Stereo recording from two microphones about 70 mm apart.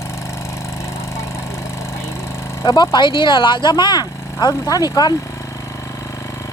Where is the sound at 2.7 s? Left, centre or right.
Left.